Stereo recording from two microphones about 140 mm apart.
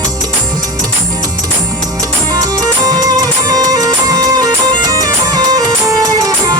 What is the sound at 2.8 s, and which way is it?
Music, 25° right (ahead or behind).